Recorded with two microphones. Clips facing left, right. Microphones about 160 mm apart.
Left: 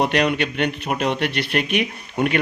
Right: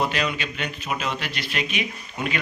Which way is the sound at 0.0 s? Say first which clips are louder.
Left 6 dB; 65° left (ahead or behind).